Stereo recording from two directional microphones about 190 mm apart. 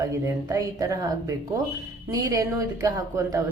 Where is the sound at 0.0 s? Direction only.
20° right (ahead or behind).